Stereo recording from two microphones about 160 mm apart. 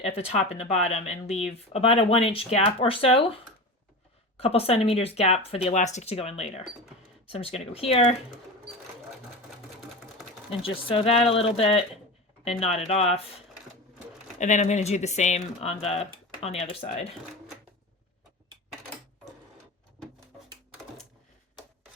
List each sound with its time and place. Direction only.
0.0 s speech: 40° left (ahead or behind)
10.8 s speech: 35° left (ahead or behind)
14.3 s speech: 50° left (ahead or behind)